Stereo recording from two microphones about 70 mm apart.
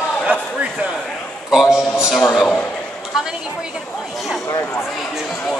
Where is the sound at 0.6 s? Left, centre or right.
Right.